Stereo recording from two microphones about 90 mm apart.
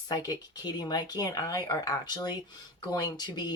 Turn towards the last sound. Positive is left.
turn(degrees=50)  # may be behind; listen again after turning